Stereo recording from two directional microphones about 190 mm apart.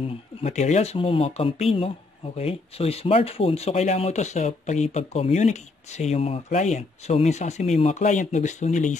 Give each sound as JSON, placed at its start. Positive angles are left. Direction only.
{"t": 0.4, "sound": "speech", "side_deg": 35}